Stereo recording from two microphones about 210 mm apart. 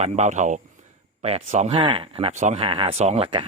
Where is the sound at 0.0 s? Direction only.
35° right (ahead or behind).